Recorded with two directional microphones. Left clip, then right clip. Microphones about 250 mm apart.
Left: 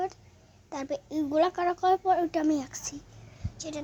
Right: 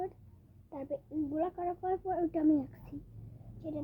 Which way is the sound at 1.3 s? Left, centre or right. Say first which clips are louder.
Left 11 dB; left.